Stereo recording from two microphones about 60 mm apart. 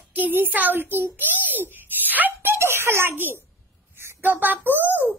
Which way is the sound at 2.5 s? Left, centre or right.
Right.